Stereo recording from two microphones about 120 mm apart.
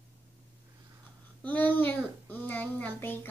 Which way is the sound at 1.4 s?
15° left (ahead or behind).